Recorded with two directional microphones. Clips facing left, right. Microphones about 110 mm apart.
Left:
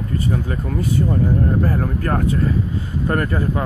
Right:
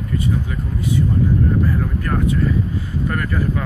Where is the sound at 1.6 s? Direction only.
40° left (ahead or behind).